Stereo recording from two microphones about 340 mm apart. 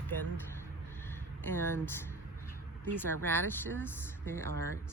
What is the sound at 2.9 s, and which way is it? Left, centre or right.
Speech, centre.